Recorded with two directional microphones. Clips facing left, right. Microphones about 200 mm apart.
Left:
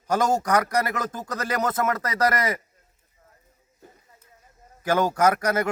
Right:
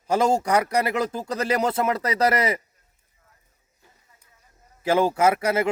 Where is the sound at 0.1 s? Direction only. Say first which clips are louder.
Right 2 dB; 10° right (ahead or behind).